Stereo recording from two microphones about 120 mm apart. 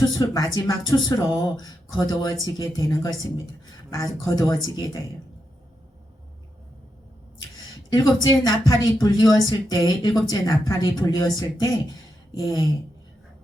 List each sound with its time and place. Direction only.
0.1 s speech: 35° left (ahead or behind)
7.9 s speech: 30° left (ahead or behind)